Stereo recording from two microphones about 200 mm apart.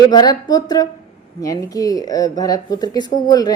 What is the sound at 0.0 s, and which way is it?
A woman's voice, 20° left (ahead or behind).